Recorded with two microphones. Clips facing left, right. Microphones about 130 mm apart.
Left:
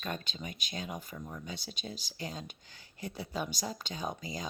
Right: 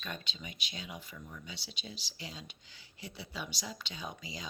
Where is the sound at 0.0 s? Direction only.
45° left (ahead or behind).